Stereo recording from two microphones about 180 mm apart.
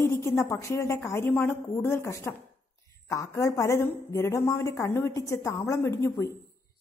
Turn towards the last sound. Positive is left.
turn(degrees=15)  # may be behind; listen again after turning